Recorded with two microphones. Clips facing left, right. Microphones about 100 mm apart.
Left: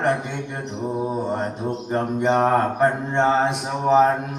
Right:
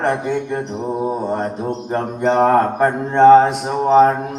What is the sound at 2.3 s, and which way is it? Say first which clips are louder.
Mantra: right 5 dB; 45° right (ahead or behind).